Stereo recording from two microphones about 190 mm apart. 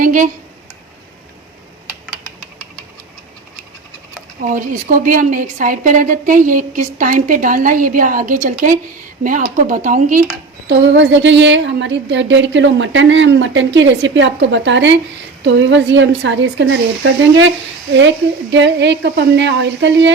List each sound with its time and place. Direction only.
0.0 s a sound: 45° right (ahead or behind)
4.4 s a woman's voice: 45° right (ahead or behind)
10.7 s a woman's voice: 70° right (ahead or behind); by 17.5 s 85° right
18.5 s a woman's voice: 70° right (ahead or behind)